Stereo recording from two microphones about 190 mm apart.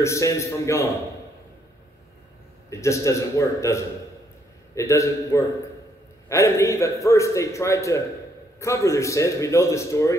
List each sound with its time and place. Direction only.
0.0 s a man's voice: 15° left (ahead or behind)
2.7 s a man's voice: 15° left (ahead or behind)